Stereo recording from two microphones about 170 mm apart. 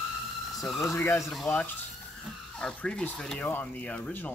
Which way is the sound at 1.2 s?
Centre (ahead or behind).